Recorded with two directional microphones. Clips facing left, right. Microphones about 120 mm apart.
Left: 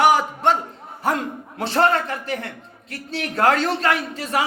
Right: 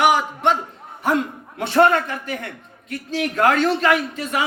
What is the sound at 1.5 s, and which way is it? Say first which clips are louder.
A man's voice: right 3 dB; 30° left (ahead or behind).